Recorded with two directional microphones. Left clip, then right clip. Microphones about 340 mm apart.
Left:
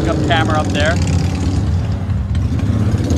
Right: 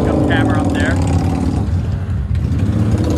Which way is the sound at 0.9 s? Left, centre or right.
Centre.